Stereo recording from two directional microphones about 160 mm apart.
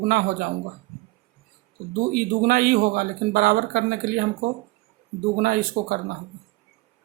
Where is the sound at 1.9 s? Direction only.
70° right (ahead or behind).